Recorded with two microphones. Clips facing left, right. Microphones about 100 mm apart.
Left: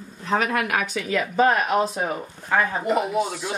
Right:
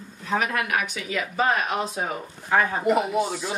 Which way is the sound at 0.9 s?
45° left (ahead or behind).